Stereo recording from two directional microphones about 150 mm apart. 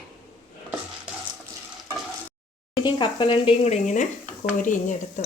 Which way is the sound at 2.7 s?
30° left (ahead or behind).